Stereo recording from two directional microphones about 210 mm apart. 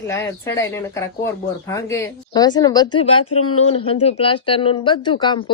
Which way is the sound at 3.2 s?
90° left.